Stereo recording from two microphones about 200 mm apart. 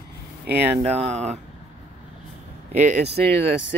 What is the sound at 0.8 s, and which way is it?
Speech, 30° right (ahead or behind).